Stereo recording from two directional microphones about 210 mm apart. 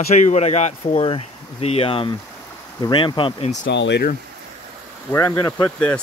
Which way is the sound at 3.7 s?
55° left (ahead or behind).